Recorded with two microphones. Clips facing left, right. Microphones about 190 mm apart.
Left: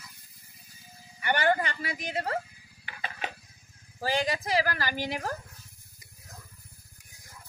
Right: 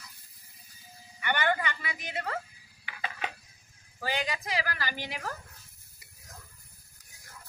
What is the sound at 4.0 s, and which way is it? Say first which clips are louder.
A woman's voice: left 4 dB; 35° left (ahead or behind).